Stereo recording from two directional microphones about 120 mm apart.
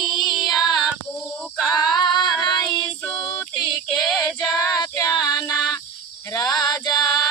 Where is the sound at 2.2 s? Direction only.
Centre (ahead or behind).